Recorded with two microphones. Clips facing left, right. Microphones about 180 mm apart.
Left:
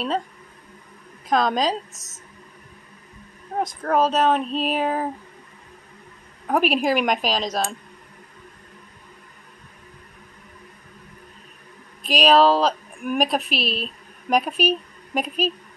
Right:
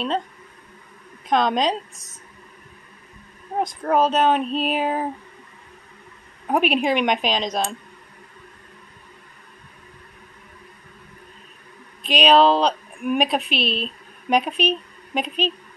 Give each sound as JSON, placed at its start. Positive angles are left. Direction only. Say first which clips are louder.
{"t": 1.3, "sound": "a woman's voice", "louder": "right 1 dB", "side_deg": 0}
{"t": 3.5, "sound": "a woman's voice", "louder": "right 1 dB", "side_deg": -5}
{"t": 6.5, "sound": "a woman's voice", "louder": "even", "side_deg": 0}
{"t": 12.0, "sound": "a woman's voice", "louder": "right 1 dB", "side_deg": 0}